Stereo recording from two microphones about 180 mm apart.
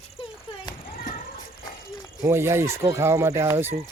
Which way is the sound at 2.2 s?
15° right (ahead or behind).